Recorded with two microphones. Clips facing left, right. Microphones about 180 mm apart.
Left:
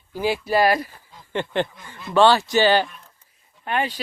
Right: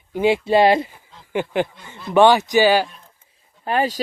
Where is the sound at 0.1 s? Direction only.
25° right (ahead or behind).